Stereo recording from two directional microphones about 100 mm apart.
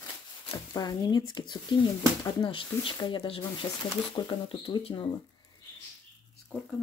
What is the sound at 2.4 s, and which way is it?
Speech, 60° left (ahead or behind).